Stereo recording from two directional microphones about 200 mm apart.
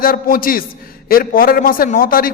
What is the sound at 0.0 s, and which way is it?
A man's voice, 45° left (ahead or behind).